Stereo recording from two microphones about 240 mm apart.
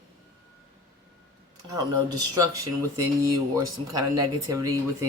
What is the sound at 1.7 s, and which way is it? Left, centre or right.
Speech, centre.